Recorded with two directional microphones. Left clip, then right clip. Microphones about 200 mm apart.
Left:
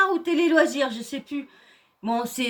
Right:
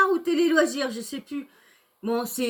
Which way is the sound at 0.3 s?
Centre (ahead or behind).